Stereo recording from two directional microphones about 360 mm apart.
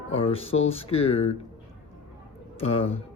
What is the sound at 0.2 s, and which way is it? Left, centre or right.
A man's voice, centre.